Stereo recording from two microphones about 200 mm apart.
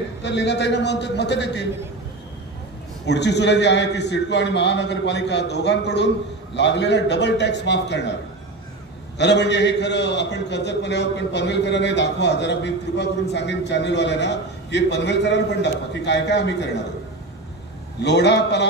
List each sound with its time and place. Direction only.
0.2 s a man's voice: 60° left (ahead or behind)
3.1 s a man's voice: 60° left (ahead or behind)
9.2 s a man's voice: 60° left (ahead or behind)
18.0 s a man's voice: 60° left (ahead or behind)